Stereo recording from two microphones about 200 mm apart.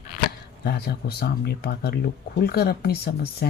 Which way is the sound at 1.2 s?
55° left (ahead or behind).